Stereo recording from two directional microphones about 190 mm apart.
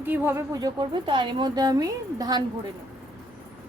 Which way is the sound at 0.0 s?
10° right (ahead or behind).